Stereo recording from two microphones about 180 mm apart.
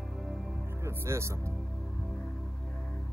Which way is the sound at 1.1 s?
15° right (ahead or behind).